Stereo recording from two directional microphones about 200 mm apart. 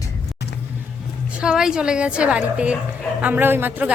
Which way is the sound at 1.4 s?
5° right (ahead or behind).